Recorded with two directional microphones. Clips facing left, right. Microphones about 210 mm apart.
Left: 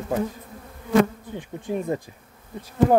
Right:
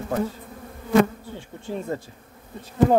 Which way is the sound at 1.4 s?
15° left (ahead or behind).